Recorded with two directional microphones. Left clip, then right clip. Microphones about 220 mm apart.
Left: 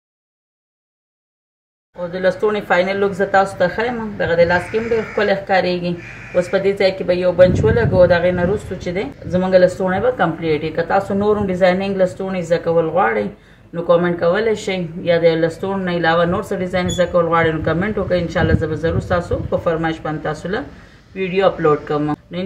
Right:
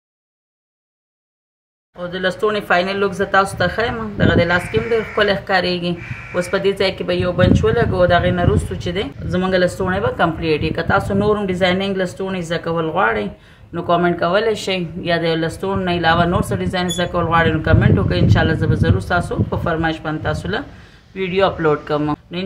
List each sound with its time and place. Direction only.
2.0 s a woman's voice: 25° right (ahead or behind)